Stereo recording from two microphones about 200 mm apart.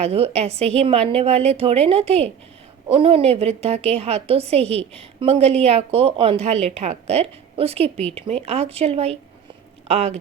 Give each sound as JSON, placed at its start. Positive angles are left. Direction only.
{"t": 0.0, "sound": "a woman's voice", "side_deg": -30}